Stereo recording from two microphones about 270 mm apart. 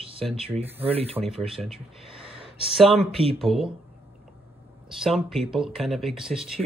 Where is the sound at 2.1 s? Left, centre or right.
Centre.